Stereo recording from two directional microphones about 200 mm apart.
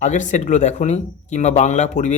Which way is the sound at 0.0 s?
40° left (ahead or behind).